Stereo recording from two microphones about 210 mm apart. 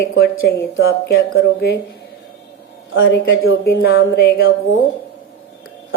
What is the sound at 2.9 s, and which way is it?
A woman's voice, 55° left (ahead or behind).